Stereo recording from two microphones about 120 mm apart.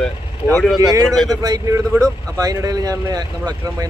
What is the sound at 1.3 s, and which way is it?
Speech, 30° right (ahead or behind).